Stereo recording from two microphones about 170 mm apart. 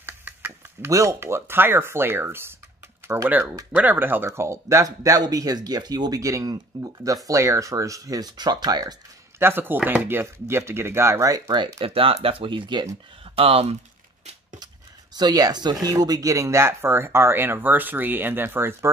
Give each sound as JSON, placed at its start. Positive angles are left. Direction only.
{"t": 0.0, "sound": "speech", "side_deg": -10}
{"t": 9.4, "sound": "speech", "side_deg": -15}
{"t": 15.1, "sound": "speech", "side_deg": -25}